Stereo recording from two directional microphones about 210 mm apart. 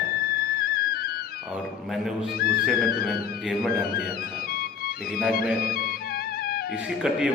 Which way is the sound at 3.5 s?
Centre (ahead or behind).